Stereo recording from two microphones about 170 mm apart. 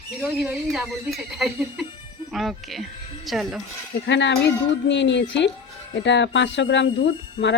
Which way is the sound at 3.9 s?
90° left.